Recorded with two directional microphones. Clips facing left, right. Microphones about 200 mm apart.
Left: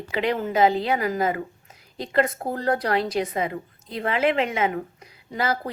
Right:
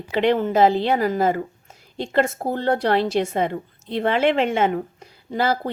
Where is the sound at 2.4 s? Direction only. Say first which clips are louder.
Right 3 dB; 30° right (ahead or behind).